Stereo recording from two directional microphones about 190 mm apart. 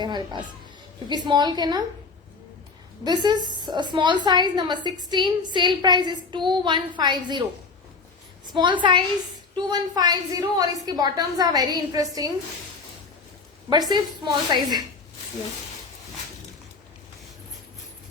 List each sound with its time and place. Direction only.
0.0 s a child's voice: 25° right (ahead or behind)
3.0 s a woman's voice: 20° right (ahead or behind)
8.5 s a woman's voice: 25° right (ahead or behind)
13.7 s a woman's voice: 20° right (ahead or behind)